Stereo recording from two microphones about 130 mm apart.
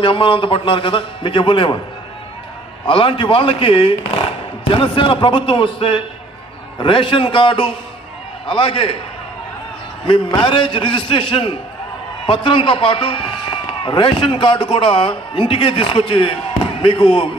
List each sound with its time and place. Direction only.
0.0 s a man's voice: 40° left (ahead or behind)
2.8 s a man's voice: 40° left (ahead or behind)
10.0 s a man's voice: 40° left (ahead or behind)